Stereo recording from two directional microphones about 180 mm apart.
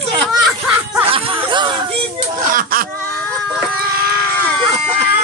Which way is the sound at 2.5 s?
50° right (ahead or behind).